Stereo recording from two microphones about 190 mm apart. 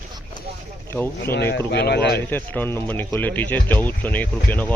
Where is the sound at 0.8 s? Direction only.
10° left (ahead or behind).